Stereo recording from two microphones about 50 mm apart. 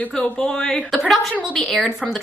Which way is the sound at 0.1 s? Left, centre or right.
Centre.